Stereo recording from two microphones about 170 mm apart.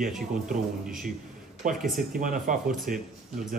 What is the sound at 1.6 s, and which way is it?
Speech, 50° right (ahead or behind).